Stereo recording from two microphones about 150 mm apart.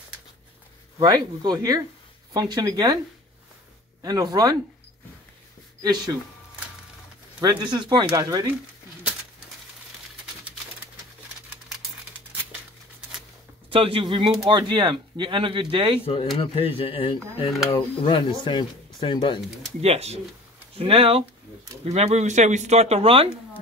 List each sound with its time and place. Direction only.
0.9 s speech: 30° right (ahead or behind)
4.0 s speech: 25° right (ahead or behind)
5.8 s speech: 30° right (ahead or behind)
7.3 s speech: 30° right (ahead or behind)
13.7 s speech: 35° right (ahead or behind)
16.3 s speech: 40° left (ahead or behind)
19.8 s speech: 45° right (ahead or behind)